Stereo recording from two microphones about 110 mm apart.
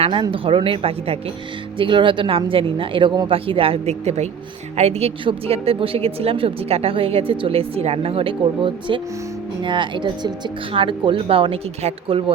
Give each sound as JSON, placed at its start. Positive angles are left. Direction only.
{"t": 0.0, "sound": "speech", "side_deg": -50}
{"t": 1.8, "sound": "speech", "side_deg": -50}
{"t": 4.8, "sound": "a woman's voice", "side_deg": -75}
{"t": 5.2, "sound": "speech", "side_deg": -55}